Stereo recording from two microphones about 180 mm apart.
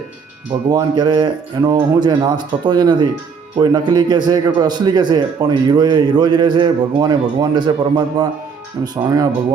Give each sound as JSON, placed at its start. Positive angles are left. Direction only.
{"t": 0.7, "sound": "a man's voice", "side_deg": -25}